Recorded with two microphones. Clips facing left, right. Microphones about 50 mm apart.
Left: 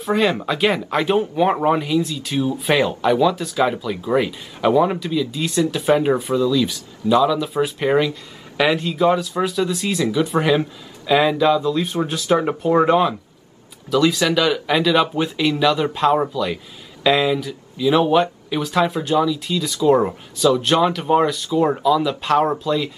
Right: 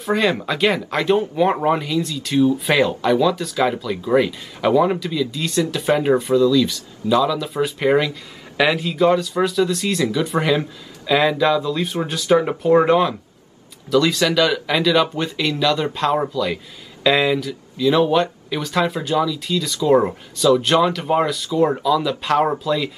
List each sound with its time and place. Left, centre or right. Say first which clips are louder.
0.0 s speech: even; centre
19.9 s speech: right 1 dB; centre